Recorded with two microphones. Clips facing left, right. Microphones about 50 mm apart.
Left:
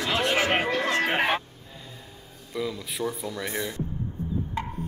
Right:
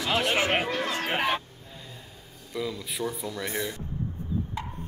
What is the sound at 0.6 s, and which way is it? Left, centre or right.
Speech, left.